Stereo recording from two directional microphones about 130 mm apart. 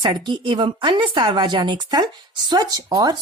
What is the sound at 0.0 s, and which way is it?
Speech, 35° right (ahead or behind).